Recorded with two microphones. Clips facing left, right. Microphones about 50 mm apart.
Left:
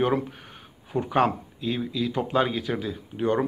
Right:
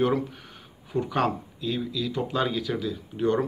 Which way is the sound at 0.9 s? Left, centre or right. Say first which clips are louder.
Left 3 dB; left.